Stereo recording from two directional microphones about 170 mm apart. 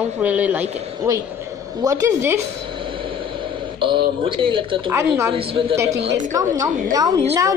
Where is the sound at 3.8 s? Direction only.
30° right (ahead or behind).